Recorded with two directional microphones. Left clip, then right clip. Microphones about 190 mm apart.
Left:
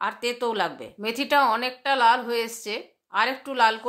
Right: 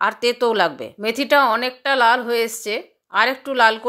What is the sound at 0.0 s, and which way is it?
Speech, 30° right (ahead or behind).